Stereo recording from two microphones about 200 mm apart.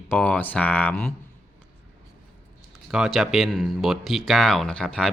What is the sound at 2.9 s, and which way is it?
Speech, centre (ahead or behind).